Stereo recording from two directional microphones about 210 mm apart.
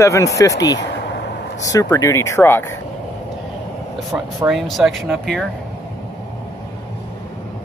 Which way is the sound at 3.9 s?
5° right (ahead or behind).